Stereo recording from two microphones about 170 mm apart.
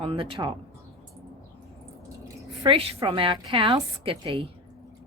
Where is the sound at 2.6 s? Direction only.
35° right (ahead or behind).